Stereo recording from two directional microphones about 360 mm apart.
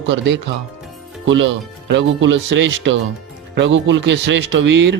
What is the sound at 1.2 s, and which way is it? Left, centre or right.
Speech, right.